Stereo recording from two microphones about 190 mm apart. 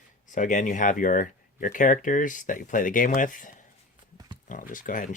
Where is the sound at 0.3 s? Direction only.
40° left (ahead or behind).